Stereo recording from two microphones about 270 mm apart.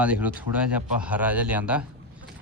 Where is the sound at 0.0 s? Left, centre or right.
Centre.